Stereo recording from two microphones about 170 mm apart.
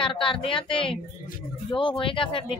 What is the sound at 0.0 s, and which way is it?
Speech, 30° left (ahead or behind).